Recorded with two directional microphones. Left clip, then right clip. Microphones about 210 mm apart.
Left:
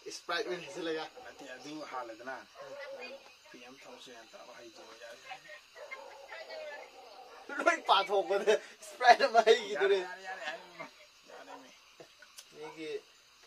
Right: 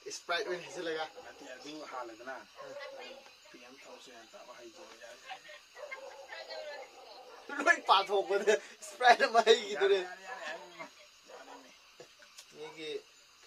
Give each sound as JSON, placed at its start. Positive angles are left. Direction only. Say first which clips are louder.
{"t": 0.3, "sound": "a man's voice", "louder": "right 1 dB", "side_deg": 0}
{"t": 1.9, "sound": "speech", "louder": "left 1 dB", "side_deg": 45}
{"t": 7.5, "sound": "a man's voice", "louder": "right 1 dB", "side_deg": -5}
{"t": 10.0, "sound": "a man's voice", "louder": "left 2 dB", "side_deg": 45}